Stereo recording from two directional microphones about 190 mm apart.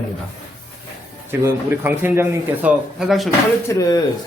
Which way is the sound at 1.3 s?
10° right (ahead or behind).